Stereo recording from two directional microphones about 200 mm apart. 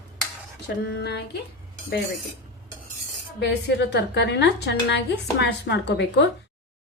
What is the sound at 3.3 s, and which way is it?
A woman's voice, 60° left (ahead or behind).